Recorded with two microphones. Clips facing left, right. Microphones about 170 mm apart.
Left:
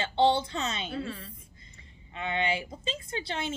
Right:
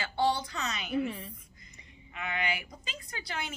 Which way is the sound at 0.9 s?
20° right (ahead or behind).